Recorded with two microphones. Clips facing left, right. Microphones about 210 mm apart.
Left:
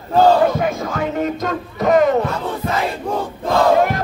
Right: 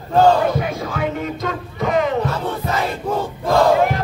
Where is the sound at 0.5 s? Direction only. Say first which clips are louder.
Left 2 dB; 45° left (ahead or behind).